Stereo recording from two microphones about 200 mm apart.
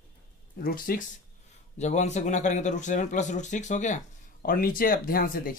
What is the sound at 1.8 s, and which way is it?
Speech, 35° left (ahead or behind).